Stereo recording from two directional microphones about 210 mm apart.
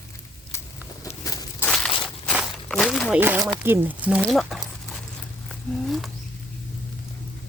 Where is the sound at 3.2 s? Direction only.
10° right (ahead or behind).